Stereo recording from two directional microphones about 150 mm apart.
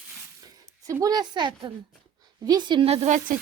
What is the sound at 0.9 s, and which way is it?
A woman's voice, 25° right (ahead or behind).